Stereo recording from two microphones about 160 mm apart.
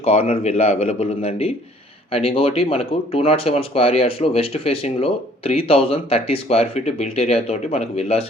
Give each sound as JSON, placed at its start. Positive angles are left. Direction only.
{"t": 0.0, "sound": "speech", "side_deg": 40}